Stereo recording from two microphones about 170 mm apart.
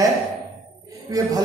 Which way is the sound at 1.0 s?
20° right (ahead or behind).